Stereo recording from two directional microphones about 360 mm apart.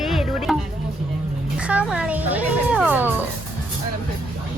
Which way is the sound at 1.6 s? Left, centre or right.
Centre.